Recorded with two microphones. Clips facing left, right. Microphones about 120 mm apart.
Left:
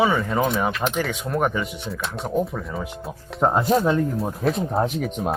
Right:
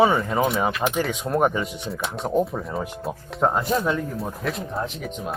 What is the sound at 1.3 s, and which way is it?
Speech, 20° right (ahead or behind).